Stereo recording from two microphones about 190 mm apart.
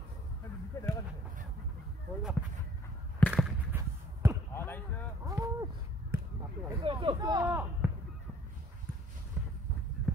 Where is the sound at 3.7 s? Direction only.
10° right (ahead or behind).